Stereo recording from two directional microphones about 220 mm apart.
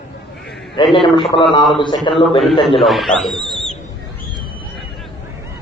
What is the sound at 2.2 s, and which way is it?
Speech, centre (ahead or behind).